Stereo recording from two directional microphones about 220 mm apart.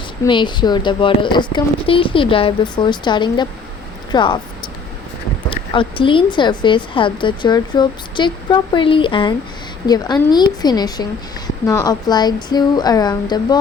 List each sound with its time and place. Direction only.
0.3 s a woman's voice: 20° left (ahead or behind)
5.5 s a woman's voice: 25° left (ahead or behind)